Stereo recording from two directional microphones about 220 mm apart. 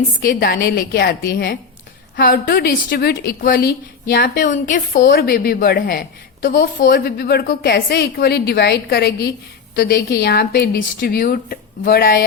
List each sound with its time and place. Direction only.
0.2 s a woman's voice: 40° left (ahead or behind)